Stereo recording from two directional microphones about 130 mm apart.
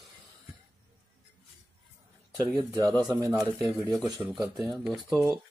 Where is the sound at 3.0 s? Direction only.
25° right (ahead or behind).